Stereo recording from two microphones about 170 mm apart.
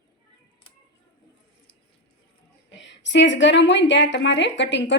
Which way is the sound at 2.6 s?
90° left.